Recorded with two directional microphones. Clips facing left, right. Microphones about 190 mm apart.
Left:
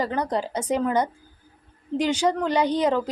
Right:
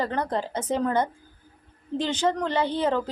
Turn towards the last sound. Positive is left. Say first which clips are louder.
# left 3 dB
turn(degrees=15)  # may be behind; listen again after turning